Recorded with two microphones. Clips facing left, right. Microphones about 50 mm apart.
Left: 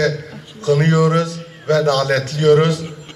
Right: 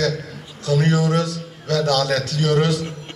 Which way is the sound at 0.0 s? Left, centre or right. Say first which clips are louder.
Left 4 dB; left.